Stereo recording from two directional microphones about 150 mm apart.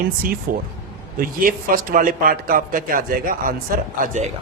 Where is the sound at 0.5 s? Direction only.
70° right (ahead or behind).